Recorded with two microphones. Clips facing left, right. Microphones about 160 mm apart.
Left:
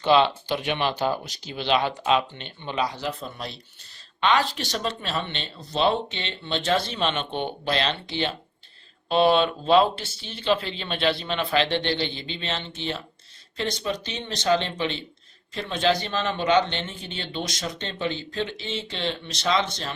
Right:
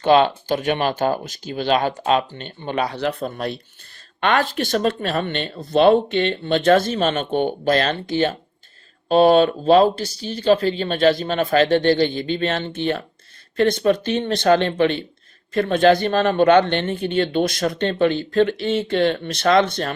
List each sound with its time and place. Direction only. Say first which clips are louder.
0.0 s a man's voice: right 4 dB; 45° right (ahead or behind)